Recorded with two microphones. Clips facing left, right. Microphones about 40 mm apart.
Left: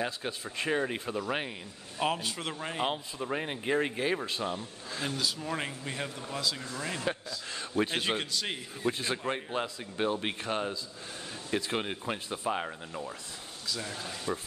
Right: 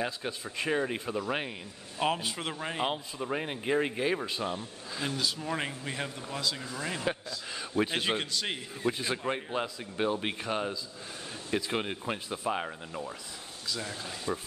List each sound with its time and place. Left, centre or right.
0.0 s a man's voice: centre